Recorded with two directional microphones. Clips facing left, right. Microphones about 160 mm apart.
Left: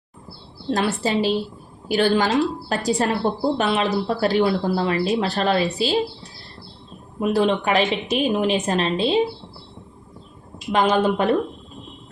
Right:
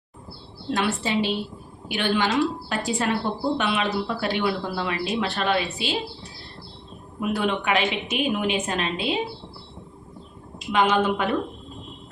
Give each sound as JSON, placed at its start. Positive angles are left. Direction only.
{"t": 0.7, "sound": "a woman's voice", "side_deg": 40}
{"t": 7.2, "sound": "a woman's voice", "side_deg": 35}
{"t": 10.7, "sound": "a woman's voice", "side_deg": 35}